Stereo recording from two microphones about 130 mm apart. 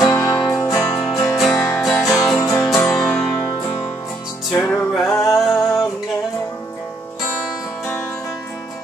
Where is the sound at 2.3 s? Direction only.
20° left (ahead or behind).